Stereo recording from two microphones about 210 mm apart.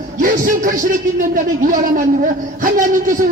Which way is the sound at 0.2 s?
40° right (ahead or behind).